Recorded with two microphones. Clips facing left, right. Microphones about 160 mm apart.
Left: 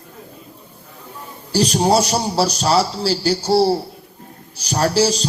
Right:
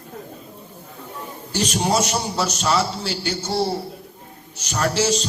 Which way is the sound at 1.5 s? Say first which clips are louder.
Left 6 dB; 35° left (ahead or behind).